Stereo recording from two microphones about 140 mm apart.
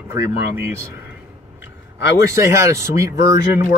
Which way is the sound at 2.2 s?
20° right (ahead or behind).